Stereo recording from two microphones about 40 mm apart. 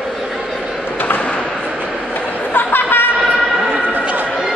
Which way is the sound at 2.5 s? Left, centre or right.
Left.